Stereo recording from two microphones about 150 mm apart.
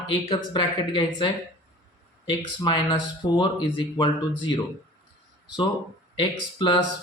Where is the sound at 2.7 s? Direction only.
30° left (ahead or behind).